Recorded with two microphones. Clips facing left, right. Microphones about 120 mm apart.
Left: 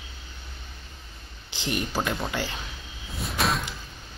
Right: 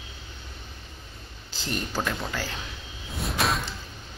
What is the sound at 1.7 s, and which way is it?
Speech, 15° left (ahead or behind).